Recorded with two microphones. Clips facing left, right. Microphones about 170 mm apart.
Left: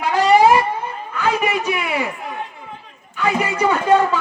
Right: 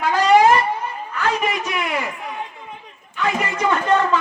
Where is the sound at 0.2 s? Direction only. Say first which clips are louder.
Left 1 dB; 5° left (ahead or behind).